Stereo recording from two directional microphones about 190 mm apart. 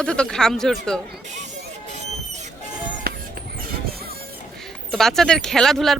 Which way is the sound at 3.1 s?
55° right (ahead or behind).